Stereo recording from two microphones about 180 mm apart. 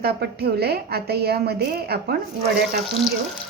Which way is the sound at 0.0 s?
60° right (ahead or behind).